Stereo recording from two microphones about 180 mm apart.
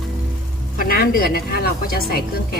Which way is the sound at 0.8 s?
55° left (ahead or behind).